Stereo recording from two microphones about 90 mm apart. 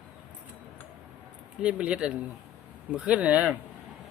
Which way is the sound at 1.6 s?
10° right (ahead or behind).